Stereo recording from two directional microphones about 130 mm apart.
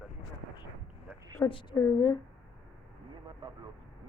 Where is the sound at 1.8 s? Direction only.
25° left (ahead or behind).